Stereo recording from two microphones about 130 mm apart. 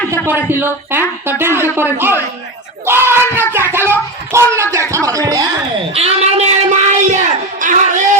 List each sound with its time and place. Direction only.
0.1 s speech: 15° right (ahead or behind)
5.9 s speech: 50° right (ahead or behind)
7.6 s speech: 75° right (ahead or behind)